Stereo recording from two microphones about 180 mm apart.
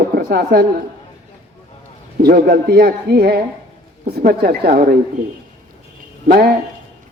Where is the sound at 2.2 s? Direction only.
60° right (ahead or behind).